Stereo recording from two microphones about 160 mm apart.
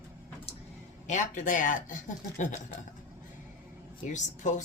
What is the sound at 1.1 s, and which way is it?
Speech, 50° left (ahead or behind).